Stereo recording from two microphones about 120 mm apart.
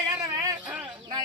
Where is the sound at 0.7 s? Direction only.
10° right (ahead or behind).